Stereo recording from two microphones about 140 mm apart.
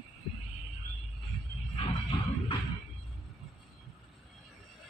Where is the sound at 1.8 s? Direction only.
35° left (ahead or behind).